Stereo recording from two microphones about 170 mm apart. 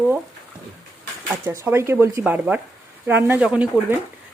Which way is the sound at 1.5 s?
15° right (ahead or behind).